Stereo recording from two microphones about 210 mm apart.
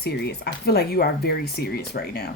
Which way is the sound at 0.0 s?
50° left (ahead or behind).